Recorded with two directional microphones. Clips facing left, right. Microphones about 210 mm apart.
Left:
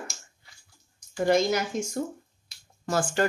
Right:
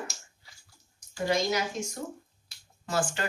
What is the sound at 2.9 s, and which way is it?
Speech, 45° left (ahead or behind).